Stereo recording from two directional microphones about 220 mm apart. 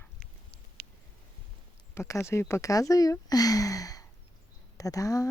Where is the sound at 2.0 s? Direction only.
10° left (ahead or behind).